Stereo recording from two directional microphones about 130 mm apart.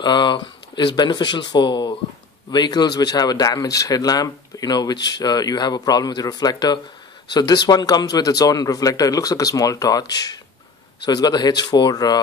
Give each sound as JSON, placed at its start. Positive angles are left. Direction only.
{"t": 0.0, "sound": "a man's voice", "side_deg": 35}